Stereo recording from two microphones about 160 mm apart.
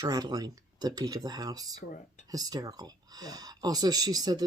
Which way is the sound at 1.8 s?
60° left (ahead or behind).